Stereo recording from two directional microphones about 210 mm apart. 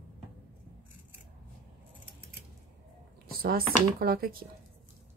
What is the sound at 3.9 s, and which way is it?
Speech, 45° right (ahead or behind).